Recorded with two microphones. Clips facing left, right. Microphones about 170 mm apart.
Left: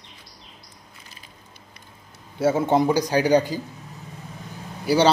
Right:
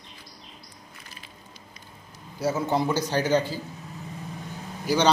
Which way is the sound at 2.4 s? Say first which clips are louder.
Left 6 dB; 25° left (ahead or behind).